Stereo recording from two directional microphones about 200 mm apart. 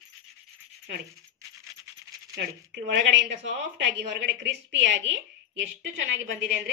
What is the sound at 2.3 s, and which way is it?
Speech, 60° right (ahead or behind).